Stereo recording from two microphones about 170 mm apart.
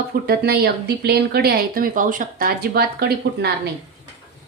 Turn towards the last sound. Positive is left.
turn(degrees=-65)  # may be behind; listen again after turning